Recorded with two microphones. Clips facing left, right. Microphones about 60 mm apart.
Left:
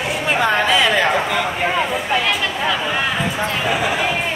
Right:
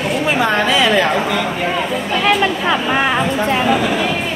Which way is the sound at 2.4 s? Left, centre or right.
Right.